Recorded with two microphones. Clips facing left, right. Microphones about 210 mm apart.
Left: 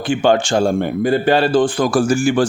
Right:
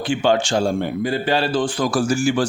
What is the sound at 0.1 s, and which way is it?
Speech, 50° left (ahead or behind).